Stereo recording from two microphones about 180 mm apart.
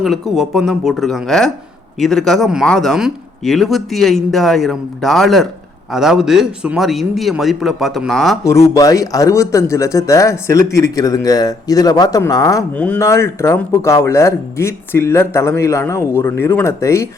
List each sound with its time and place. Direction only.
0.0 s speech: centre (ahead or behind)
8.7 s speech: 20° left (ahead or behind)
12.7 s speech: 10° left (ahead or behind)